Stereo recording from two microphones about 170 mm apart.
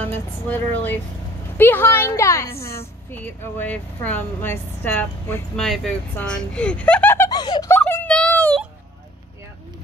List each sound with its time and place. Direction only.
0.0 s speech: 10° left (ahead or behind)
7.2 s giggle: 25° left (ahead or behind)
7.7 s a sound: 10° left (ahead or behind)